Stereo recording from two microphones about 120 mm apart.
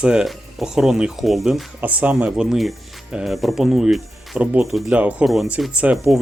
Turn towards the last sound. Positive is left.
turn(degrees=-10)  # may be behind; listen again after turning